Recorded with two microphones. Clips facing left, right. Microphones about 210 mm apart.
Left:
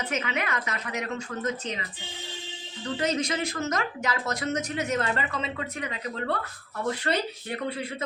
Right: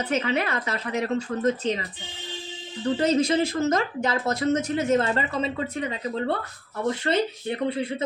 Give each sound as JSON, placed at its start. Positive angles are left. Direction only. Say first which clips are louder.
{"t": 0.1, "sound": "speech", "louder": "right 6 dB", "side_deg": -35}
{"t": 2.8, "sound": "speech", "louder": "right 6 dB", "side_deg": -30}